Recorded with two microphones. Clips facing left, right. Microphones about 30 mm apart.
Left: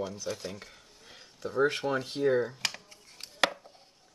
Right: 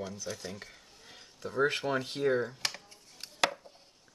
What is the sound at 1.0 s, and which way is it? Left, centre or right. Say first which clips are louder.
Speech: left 3 dB; centre.